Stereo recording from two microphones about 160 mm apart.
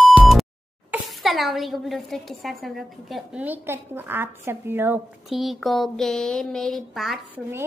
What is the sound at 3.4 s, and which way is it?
A child's voice, 10° right (ahead or behind).